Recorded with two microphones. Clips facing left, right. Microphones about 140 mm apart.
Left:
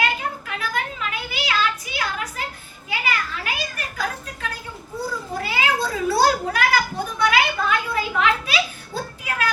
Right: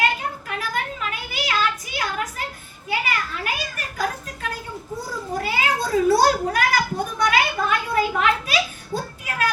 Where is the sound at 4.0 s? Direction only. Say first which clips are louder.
Right 2 dB; 45° right (ahead or behind).